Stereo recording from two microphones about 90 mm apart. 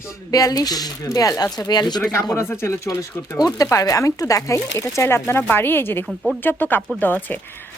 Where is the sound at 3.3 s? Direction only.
45° left (ahead or behind); by 7.3 s 20° left (ahead or behind).